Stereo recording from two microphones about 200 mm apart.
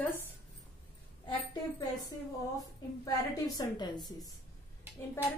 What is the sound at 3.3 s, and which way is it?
Speech, 20° left (ahead or behind).